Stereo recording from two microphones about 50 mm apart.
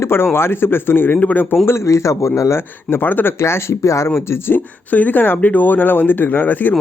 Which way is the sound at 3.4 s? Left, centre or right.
Left.